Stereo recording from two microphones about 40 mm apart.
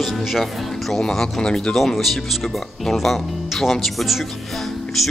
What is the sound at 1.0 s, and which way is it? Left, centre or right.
Speech, centre.